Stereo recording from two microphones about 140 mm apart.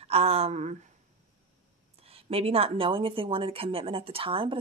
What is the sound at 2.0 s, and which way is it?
Speech, 45° right (ahead or behind).